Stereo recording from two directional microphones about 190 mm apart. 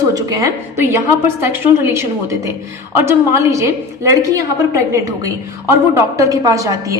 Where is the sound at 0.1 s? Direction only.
15° right (ahead or behind).